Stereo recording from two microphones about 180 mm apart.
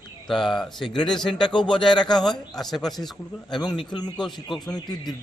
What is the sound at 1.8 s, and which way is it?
Speech, 25° left (ahead or behind).